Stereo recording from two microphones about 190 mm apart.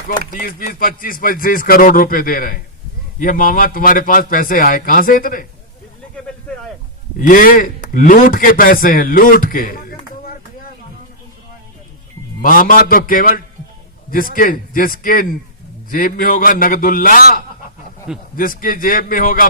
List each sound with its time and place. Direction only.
0.3 s a man's voice: 50° left (ahead or behind)
7.2 s a man's voice: 45° left (ahead or behind)
12.4 s a man's voice: 45° left (ahead or behind)